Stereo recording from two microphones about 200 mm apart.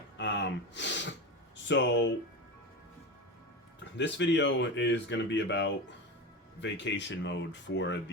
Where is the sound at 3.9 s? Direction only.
60° left (ahead or behind).